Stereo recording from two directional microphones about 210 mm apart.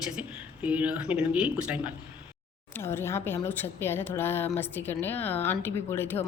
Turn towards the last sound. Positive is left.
turn(degrees=10)  # may be behind; listen again after turning